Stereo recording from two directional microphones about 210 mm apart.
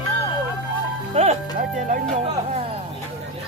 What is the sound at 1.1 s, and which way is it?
Speech, 30° right (ahead or behind).